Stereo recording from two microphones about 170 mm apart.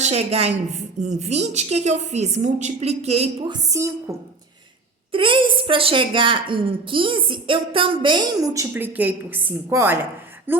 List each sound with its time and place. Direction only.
0.0 s a woman's voice: 40° right (ahead or behind)
3.5 s a woman's voice: 20° right (ahead or behind)
5.1 s a woman's voice: 30° right (ahead or behind); by 10.6 s 15° right (ahead or behind)